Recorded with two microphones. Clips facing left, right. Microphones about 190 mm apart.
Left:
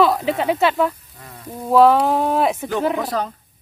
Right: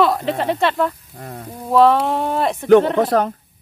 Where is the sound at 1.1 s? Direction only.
45° right (ahead or behind).